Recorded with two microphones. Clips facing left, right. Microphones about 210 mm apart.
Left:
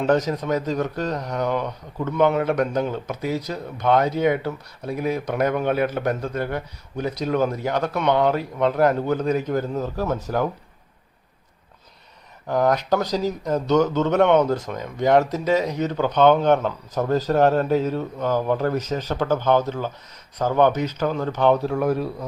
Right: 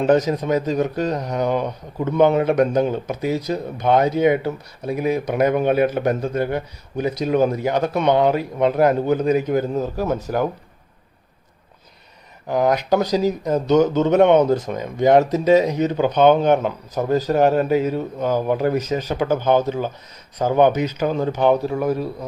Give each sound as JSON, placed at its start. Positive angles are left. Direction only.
{"t": 0.1, "sound": "speech", "side_deg": -15}
{"t": 12.5, "sound": "speech", "side_deg": -10}